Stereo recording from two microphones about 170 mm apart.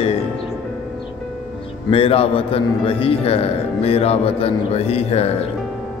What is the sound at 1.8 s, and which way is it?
A man's voice, 35° left (ahead or behind).